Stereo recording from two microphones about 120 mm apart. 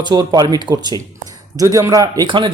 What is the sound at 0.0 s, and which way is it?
Speech, 30° right (ahead or behind).